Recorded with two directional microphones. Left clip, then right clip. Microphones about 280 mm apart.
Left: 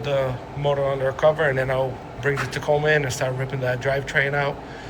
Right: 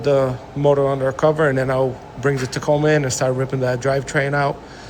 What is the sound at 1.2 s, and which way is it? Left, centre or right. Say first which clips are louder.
Speech: right 2 dB; right.